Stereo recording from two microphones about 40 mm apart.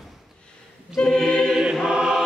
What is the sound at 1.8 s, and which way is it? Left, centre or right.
Chant, right.